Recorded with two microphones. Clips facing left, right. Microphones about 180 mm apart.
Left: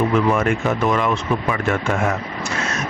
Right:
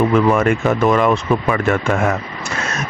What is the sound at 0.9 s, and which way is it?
Speech, 50° right (ahead or behind).